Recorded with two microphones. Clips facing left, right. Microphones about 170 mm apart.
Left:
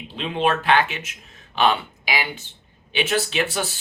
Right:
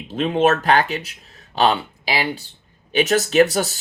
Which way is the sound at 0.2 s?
45° right (ahead or behind).